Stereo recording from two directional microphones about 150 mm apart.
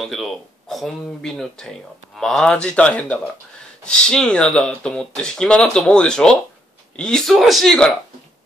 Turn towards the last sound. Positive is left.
turn(degrees=5)  # may be behind; listen again after turning